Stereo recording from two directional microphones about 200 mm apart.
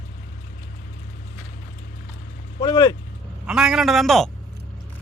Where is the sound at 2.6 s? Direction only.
20° left (ahead or behind).